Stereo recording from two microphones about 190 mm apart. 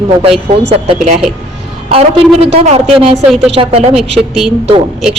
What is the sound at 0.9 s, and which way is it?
Speech, 35° right (ahead or behind).